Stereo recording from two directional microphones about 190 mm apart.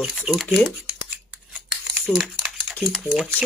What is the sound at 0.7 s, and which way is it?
Scissors, 5° right (ahead or behind).